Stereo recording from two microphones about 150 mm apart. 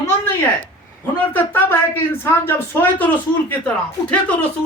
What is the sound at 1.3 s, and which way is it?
Speech, 10° left (ahead or behind).